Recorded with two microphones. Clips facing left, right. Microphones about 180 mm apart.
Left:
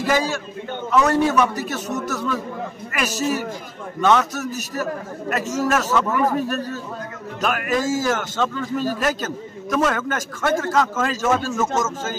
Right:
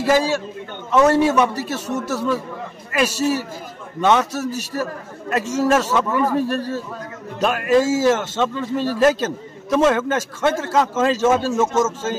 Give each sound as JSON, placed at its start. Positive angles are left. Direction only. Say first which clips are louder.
{"t": 0.0, "sound": "a man's voice", "louder": "right 4 dB", "side_deg": -30}